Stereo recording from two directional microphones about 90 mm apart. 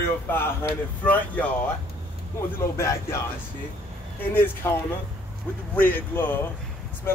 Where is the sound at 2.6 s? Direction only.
30° left (ahead or behind).